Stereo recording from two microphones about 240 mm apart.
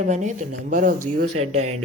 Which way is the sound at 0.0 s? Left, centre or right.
Right.